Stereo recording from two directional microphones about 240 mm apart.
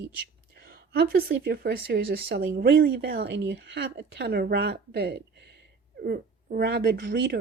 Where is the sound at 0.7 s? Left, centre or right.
Right.